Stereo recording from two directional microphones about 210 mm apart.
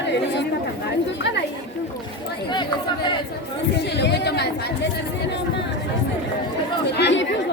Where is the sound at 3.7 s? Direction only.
55° left (ahead or behind).